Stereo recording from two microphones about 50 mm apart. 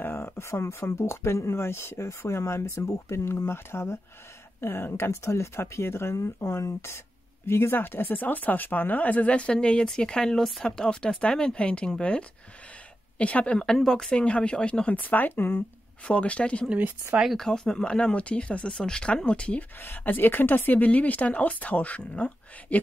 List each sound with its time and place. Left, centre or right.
0.0 s a sound: left
0.4 s speech: left
4.6 s speech: left
7.4 s speech: left
13.7 s speech: centre
14.9 s speech: left
16.1 s speech: left
17.4 s speech: centre
19.8 s a woman's voice: left